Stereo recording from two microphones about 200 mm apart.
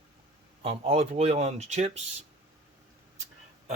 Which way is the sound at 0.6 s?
30° right (ahead or behind).